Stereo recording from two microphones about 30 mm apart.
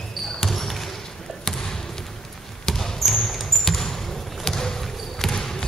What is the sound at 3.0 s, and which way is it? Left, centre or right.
Basketball bounce, centre.